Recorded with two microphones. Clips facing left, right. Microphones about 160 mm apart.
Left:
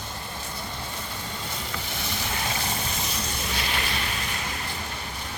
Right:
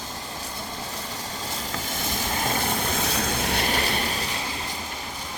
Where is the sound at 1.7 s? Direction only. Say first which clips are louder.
Right 3 dB; 45° right (ahead or behind).